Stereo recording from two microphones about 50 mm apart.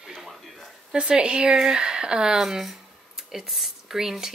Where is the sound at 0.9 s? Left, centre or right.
Centre.